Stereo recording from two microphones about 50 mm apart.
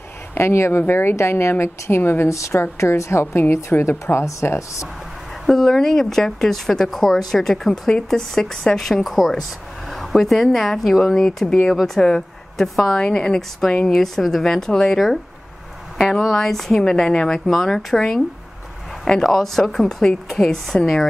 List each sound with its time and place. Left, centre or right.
0.3 s a woman's voice: left
2.2 s a woman's voice: left
2.6 s a woman's voice: left
5.5 s speech: centre
13.0 s a woman's voice: centre
16.0 s a woman's voice: centre